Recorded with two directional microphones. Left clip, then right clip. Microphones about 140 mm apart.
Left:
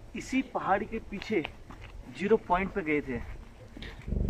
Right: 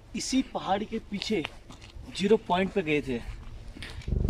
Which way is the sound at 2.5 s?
75° right (ahead or behind).